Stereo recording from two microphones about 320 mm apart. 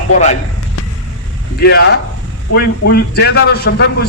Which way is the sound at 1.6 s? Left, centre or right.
Left.